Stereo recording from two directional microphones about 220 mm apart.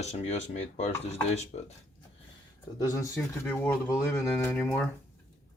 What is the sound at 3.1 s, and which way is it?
Speech, 10° left (ahead or behind).